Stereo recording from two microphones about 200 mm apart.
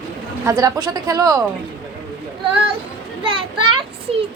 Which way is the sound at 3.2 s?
25° right (ahead or behind).